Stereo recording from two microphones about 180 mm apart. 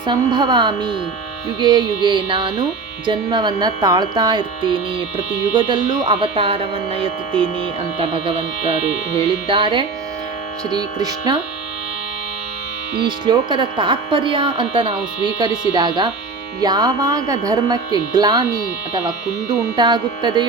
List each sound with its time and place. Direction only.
0.0 s speech: 25° right (ahead or behind)
9.5 s speech: 30° right (ahead or behind)
13.0 s speech: 25° right (ahead or behind)